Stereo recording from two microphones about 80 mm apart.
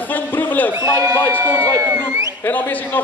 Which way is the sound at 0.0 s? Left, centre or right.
Left.